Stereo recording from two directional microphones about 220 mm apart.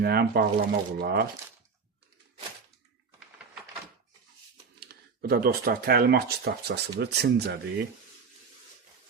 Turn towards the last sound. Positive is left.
turn(degrees=-50)  # may be behind; listen again after turning